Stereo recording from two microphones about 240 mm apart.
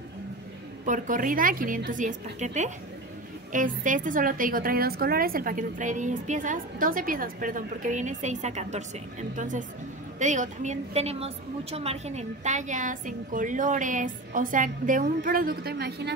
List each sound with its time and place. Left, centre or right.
0.8 s a woman's voice: right